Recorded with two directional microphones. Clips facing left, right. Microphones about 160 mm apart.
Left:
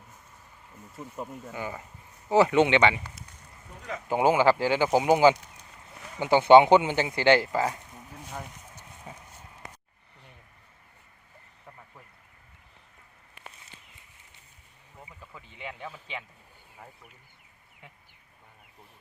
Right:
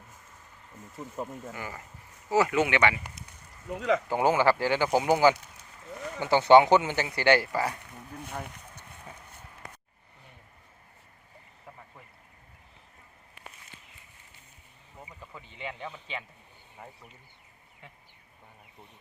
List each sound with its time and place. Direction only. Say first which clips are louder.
0.9 s speech: right 1 dB; 5° right (ahead or behind)
1.5 s speech: left 4 dB; 15° left (ahead or behind)
3.7 s speech: right 12 dB; 85° right
4.1 s speech: left 5 dB; 15° left (ahead or behind)
9.1 s a sound: left 3 dB; 15° left (ahead or behind)
14.9 s speech: right 2 dB; 5° right (ahead or behind)